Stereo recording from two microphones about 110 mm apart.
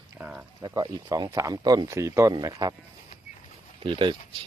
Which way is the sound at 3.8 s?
50° right (ahead or behind).